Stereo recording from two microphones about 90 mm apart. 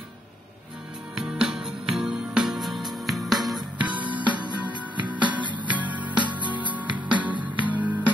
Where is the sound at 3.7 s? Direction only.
15° right (ahead or behind).